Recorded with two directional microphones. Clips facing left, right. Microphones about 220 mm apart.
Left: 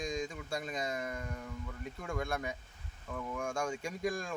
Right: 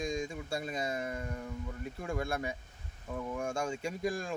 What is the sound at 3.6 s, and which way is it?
Speech, 25° right (ahead or behind).